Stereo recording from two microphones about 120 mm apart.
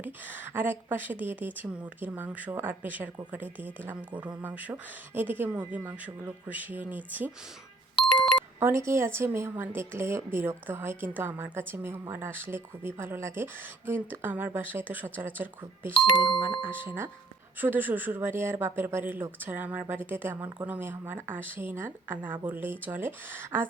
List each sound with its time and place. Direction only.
0.0 s speech: 15° right (ahead or behind)
7.9 s music: 5° left (ahead or behind)
8.5 s speech: 25° right (ahead or behind)
15.9 s speech: 40° left (ahead or behind)
16.6 s speech: 15° right (ahead or behind)